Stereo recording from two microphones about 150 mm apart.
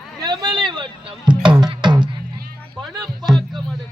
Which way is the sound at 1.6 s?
30° right (ahead or behind).